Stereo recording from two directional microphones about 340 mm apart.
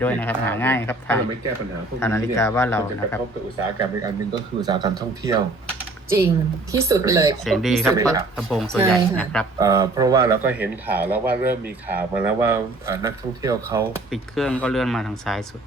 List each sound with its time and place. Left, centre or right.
0.0 s speech: centre
3.8 s speech: centre
9.6 s speech: centre